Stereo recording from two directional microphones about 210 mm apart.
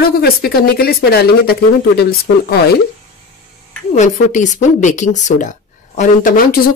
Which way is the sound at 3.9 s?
35° left (ahead or behind).